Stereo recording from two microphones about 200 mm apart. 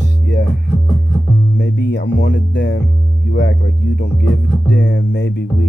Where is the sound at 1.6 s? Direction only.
60° left (ahead or behind).